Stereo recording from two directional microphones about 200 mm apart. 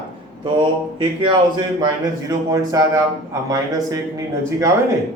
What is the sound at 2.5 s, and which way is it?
A man's voice, 15° right (ahead or behind).